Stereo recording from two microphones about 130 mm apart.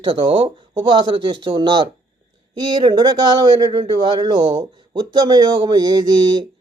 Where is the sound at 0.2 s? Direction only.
35° right (ahead or behind).